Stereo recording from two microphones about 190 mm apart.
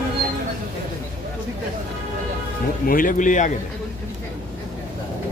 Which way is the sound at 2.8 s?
45° left (ahead or behind).